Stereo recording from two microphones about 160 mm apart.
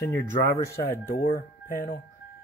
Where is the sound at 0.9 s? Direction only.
65° left (ahead or behind).